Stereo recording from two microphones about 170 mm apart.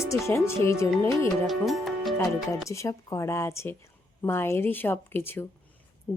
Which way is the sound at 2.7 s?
20° left (ahead or behind).